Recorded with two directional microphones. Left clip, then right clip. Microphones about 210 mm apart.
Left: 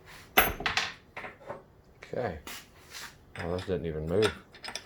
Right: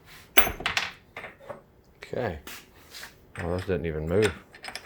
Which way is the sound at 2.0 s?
45° right (ahead or behind).